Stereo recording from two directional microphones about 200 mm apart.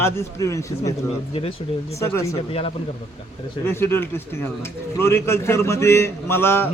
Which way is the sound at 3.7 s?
10° left (ahead or behind).